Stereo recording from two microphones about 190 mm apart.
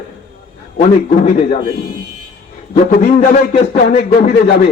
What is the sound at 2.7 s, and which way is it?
A man's voice, 45° left (ahead or behind).